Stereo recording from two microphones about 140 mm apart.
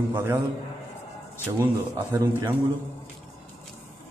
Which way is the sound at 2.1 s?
15° right (ahead or behind).